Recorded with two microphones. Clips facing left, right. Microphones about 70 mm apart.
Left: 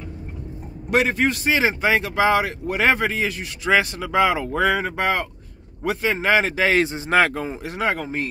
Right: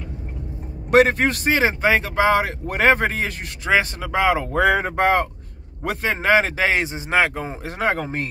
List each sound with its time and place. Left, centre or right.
0.8 s speech: right
3.7 s speech: right
8.0 s speech: right